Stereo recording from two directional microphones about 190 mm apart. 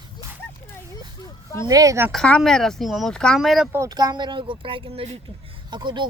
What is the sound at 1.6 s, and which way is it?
Speech, 20° right (ahead or behind).